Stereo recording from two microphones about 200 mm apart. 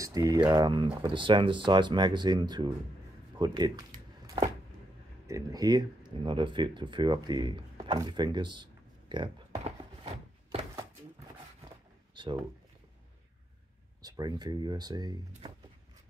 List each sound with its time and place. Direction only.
0.0 s speech: 15° right (ahead or behind)
5.2 s speech: 15° right (ahead or behind)
9.1 s a sound: 25° right (ahead or behind)
12.2 s speech: 20° right (ahead or behind)
14.0 s speech: 20° right (ahead or behind)